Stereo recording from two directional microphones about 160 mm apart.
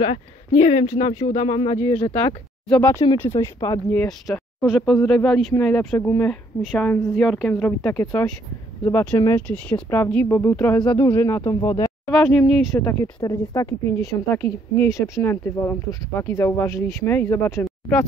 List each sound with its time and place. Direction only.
0.5 s speech: 45° left (ahead or behind)
2.7 s a woman's voice: 15° left (ahead or behind)
3.3 s speech: 30° left (ahead or behind)
4.3 s speech: centre (ahead or behind)
6.6 s a woman's voice: centre (ahead or behind); by 9.4 s 25° left (ahead or behind)
9.5 s a woman's voice: 5° left (ahead or behind)
10.8 s speech: 25° left (ahead or behind)
11.1 s speech: 15° left (ahead or behind)
12.1 s speech: 5° left (ahead or behind)
12.7 s a woman's voice: 20° left (ahead or behind)